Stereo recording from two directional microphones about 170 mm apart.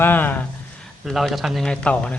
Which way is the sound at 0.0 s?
10° left (ahead or behind).